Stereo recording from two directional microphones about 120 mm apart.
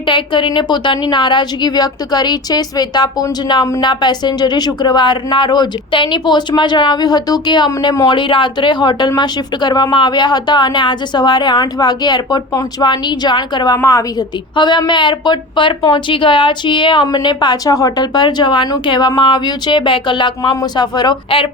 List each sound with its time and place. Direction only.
0.1 s speech: 40° left (ahead or behind)